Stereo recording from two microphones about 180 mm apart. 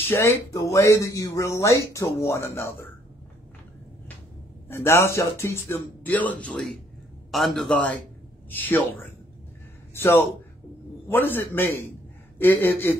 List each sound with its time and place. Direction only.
0.1 s speech: 15° left (ahead or behind)
4.6 s a man's voice: 15° left (ahead or behind)